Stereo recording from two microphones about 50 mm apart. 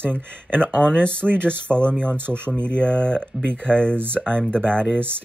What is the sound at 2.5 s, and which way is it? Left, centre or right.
Speech, left.